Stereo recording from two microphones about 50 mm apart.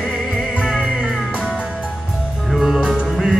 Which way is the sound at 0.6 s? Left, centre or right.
Centre.